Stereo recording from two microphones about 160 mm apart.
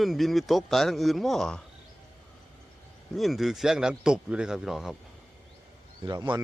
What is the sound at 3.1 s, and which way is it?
Speech, centre (ahead or behind).